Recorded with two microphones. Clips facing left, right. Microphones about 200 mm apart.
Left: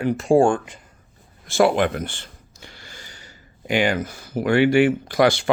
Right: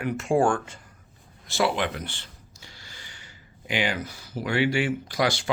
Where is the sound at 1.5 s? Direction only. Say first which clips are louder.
Left 7 dB; 50° left (ahead or behind).